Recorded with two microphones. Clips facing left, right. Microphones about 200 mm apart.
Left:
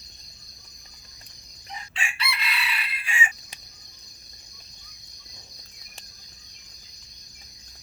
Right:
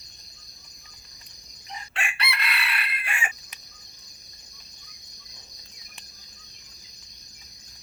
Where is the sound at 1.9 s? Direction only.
60° right (ahead or behind).